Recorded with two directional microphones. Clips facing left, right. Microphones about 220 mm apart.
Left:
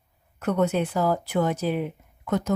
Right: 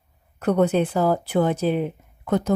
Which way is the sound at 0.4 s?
35° right (ahead or behind).